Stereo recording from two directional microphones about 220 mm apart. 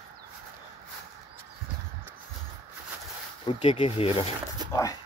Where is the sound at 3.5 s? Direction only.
25° left (ahead or behind).